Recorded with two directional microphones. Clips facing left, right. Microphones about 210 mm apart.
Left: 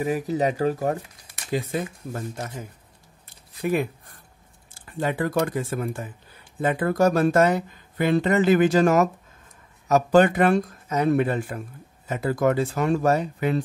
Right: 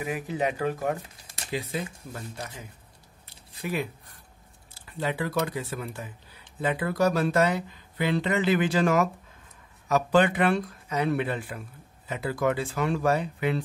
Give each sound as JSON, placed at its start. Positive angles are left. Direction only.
{"t": 0.0, "sound": "speech", "side_deg": 40}
{"t": 1.5, "sound": "speech", "side_deg": 50}
{"t": 3.3, "sound": "squish", "side_deg": 50}
{"t": 4.7, "sound": "speech", "side_deg": 50}